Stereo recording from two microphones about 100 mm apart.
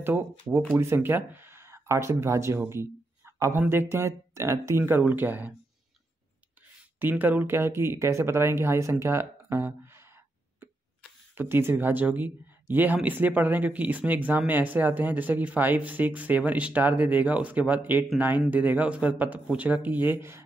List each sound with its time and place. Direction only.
0.0 s speech: 25° right (ahead or behind)
7.0 s speech: 20° right (ahead or behind)
11.3 s speech: 20° right (ahead or behind)